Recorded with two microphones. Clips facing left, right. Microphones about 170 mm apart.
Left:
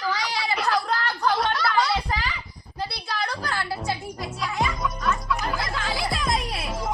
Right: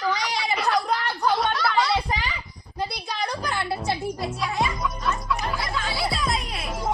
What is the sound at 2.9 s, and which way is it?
Music, 15° right (ahead or behind).